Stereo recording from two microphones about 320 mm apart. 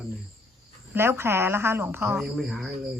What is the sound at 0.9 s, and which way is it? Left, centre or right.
A woman's voice, centre.